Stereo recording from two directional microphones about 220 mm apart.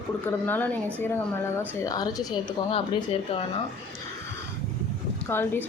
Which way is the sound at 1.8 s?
15° left (ahead or behind).